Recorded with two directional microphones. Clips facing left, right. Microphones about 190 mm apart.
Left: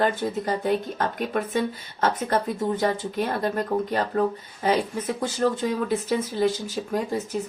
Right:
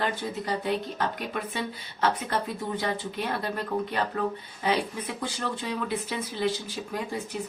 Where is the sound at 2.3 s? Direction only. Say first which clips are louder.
Left 6 dB; 45° left (ahead or behind).